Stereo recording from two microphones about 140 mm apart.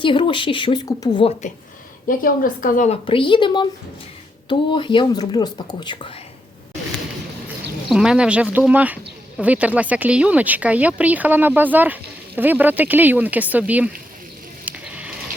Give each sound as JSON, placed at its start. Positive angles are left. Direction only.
{"t": 0.0, "sound": "speech", "side_deg": 35}
{"t": 0.9, "sound": "speech", "side_deg": 25}
{"t": 2.0, "sound": "a woman's voice", "side_deg": 80}
{"t": 2.9, "sound": "speech", "side_deg": 40}
{"t": 7.9, "sound": "speech", "side_deg": -5}
{"t": 14.6, "sound": "a sound", "side_deg": -10}